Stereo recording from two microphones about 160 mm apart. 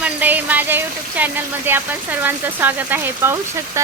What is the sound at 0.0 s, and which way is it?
Speech, 10° right (ahead or behind).